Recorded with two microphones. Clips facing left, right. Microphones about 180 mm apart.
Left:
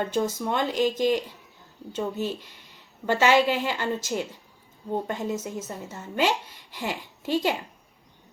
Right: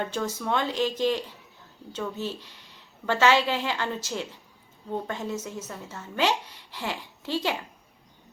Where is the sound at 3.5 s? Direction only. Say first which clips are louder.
Left 2 dB; 10° left (ahead or behind).